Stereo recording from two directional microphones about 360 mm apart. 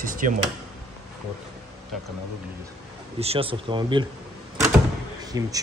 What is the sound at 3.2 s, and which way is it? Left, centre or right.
Speech, centre.